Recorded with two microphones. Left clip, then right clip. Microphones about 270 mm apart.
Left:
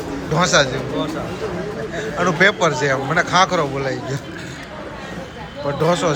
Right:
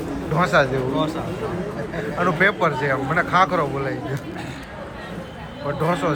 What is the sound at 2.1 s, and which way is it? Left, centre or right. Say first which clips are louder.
A man's voice: left 3 dB; centre.